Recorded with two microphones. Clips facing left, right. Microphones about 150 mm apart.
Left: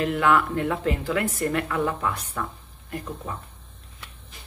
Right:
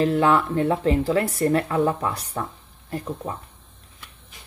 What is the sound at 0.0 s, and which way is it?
Speech, 30° right (ahead or behind).